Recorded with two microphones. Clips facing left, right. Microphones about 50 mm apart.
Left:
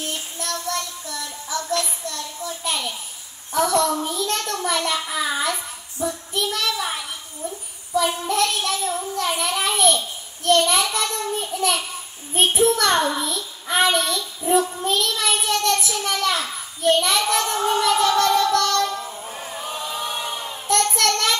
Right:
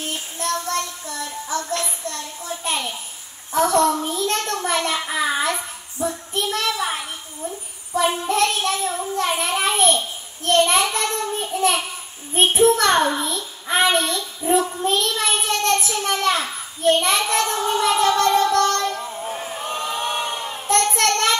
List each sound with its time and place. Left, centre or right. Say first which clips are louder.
0.1 s child singing: right 4 dB; right
3.5 s a child's voice: right 2 dB; right
7.9 s a child's voice: right 1 dB; right
19.2 s a sound: right 4 dB; right
20.4 s child singing: right 1 dB; right